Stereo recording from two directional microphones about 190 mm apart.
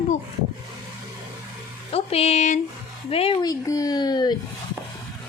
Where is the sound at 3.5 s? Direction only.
20° left (ahead or behind).